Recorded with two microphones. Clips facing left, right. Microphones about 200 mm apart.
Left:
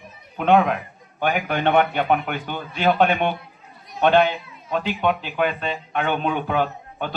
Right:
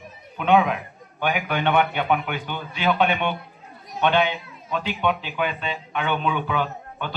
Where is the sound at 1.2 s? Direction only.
40° left (ahead or behind).